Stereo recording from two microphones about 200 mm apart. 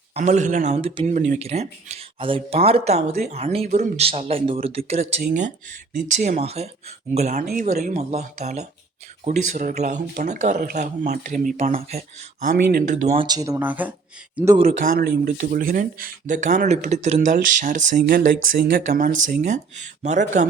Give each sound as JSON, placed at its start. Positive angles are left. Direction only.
{"t": 0.1, "sound": "speech", "side_deg": -35}
{"t": 13.1, "sound": "speech", "side_deg": -20}
{"t": 14.7, "sound": "speech", "side_deg": -50}